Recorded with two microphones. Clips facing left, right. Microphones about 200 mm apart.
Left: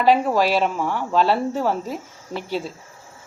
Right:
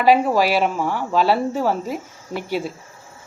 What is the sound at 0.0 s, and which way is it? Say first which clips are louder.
A woman's voice: right 2 dB; 10° right (ahead or behind).